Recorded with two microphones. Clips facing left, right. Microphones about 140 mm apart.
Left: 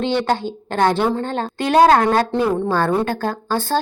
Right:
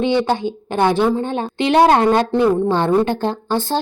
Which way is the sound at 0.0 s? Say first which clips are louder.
Right 2 dB; 15° right (ahead or behind).